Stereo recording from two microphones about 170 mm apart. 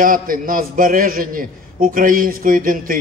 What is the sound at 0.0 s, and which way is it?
A man's voice, 55° right (ahead or behind).